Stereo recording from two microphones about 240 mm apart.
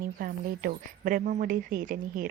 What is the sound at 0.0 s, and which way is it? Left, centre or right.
A woman's voice, right.